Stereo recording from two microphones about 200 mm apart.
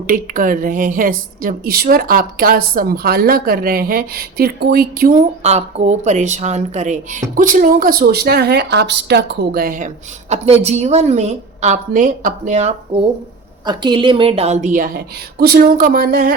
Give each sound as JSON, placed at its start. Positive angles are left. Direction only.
{"t": 0.1, "sound": "a woman's voice", "side_deg": -45}
{"t": 13.7, "sound": "a woman's voice", "side_deg": -25}